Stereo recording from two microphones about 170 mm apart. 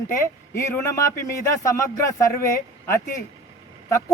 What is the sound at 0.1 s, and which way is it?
Speech, 15° left (ahead or behind).